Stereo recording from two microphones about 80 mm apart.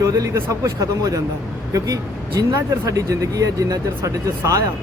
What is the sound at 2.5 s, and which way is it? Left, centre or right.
Speech, right.